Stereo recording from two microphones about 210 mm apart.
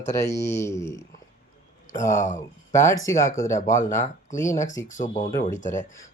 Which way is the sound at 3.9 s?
35° left (ahead or behind).